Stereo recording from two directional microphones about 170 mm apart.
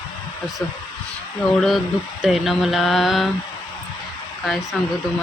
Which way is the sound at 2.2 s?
Centre (ahead or behind).